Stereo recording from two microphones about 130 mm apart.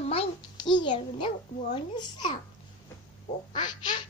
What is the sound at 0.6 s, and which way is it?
Speech, 35° left (ahead or behind).